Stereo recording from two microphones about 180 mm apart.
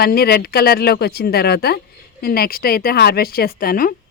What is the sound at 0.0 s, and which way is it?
Speech, 60° left (ahead or behind).